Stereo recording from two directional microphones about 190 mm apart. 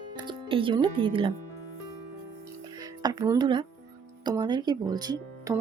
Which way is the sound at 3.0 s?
20° right (ahead or behind).